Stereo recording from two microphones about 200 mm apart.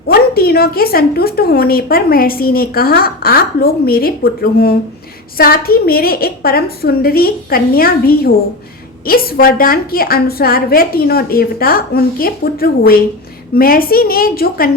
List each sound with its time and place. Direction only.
0.1 s a woman's voice: 50° left (ahead or behind)